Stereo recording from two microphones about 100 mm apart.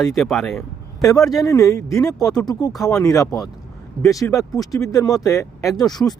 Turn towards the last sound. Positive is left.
turn(degrees=20)  # may be behind; listen again after turning